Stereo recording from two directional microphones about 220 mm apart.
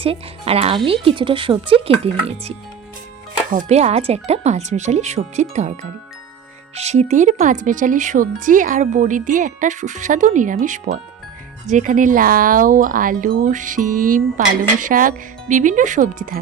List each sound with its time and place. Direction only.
0.0 s speech: 25° right (ahead or behind)
3.5 s speech: 35° right (ahead or behind)
6.7 s speech: 30° right (ahead or behind)